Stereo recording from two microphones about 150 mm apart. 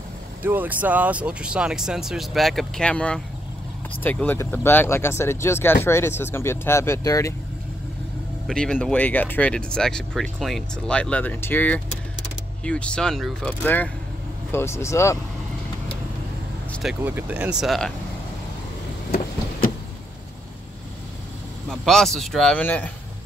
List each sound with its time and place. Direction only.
0.4 s speech: 15° right (ahead or behind); by 7.3 s 20° left (ahead or behind)
8.5 s speech: 5° left (ahead or behind)
17.0 s speech: 10° right (ahead or behind)
21.6 s speech: centre (ahead or behind)